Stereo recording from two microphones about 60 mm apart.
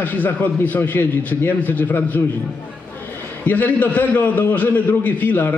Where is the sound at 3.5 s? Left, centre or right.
Left.